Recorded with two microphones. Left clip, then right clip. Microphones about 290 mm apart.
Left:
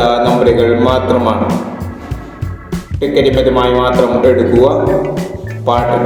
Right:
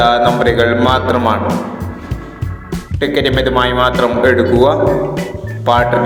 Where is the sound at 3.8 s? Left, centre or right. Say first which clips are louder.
Left 1 dB; right.